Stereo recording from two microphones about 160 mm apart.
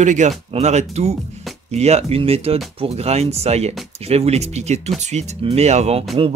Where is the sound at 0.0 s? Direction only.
50° right (ahead or behind).